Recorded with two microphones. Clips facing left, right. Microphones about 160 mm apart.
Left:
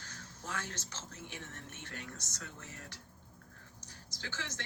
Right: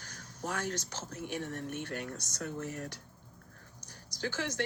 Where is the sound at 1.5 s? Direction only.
55° right (ahead or behind).